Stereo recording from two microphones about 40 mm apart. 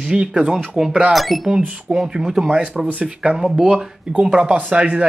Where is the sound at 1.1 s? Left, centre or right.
Centre.